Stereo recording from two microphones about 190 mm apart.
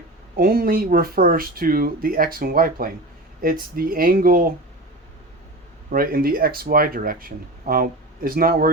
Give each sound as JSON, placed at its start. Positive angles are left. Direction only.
{"t": 0.3, "sound": "speech", "side_deg": -50}
{"t": 5.9, "sound": "speech", "side_deg": -50}